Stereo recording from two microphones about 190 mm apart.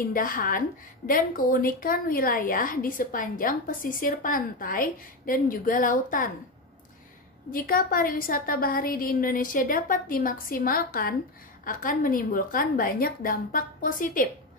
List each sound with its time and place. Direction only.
0.1 s a woman's voice: 45° left (ahead or behind)
7.5 s a woman's voice: 50° left (ahead or behind)